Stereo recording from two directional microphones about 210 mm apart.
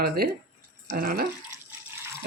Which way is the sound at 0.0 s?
50° right (ahead or behind).